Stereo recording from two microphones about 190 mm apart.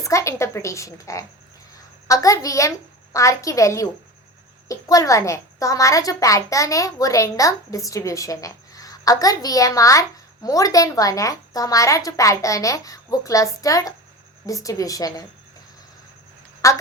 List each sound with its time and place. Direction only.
0.0 s a child's voice: 15° left (ahead or behind)
16.6 s a child's voice: 15° left (ahead or behind)